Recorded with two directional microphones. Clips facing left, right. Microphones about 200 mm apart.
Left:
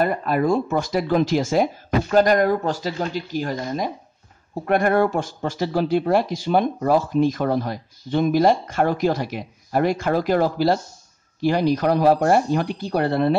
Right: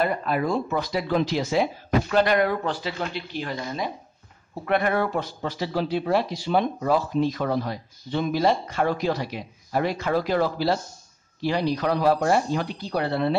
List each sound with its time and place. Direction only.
0.0 s speech: 45° left (ahead or behind)